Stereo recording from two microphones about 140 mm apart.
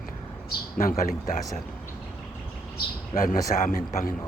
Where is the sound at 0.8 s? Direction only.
85° left.